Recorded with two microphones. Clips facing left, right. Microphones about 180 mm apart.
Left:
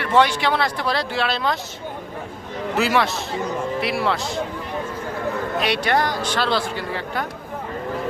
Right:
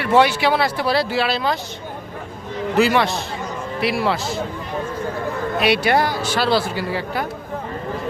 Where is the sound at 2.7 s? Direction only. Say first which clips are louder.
Right 3 dB; centre (ahead or behind).